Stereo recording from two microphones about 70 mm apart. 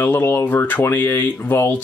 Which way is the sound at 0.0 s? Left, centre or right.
Left.